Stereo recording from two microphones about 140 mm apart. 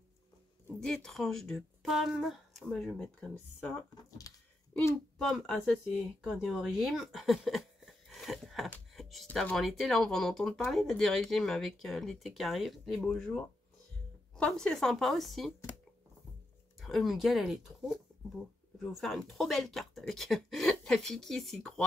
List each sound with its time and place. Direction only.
0.7 s speech: 5° left (ahead or behind)
4.2 s speech: 25° left (ahead or behind)
5.2 s speech: 5° left (ahead or behind)
16.8 s speech: centre (ahead or behind)